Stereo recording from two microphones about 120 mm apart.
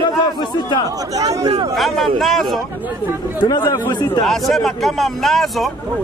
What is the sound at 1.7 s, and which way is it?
Speech, centre (ahead or behind).